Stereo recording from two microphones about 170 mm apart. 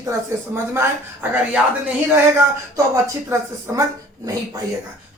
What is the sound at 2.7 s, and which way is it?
Speech, 20° right (ahead or behind).